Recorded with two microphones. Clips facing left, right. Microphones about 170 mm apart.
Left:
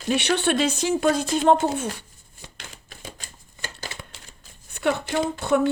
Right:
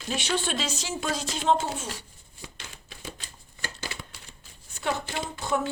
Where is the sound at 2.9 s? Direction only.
45° left (ahead or behind).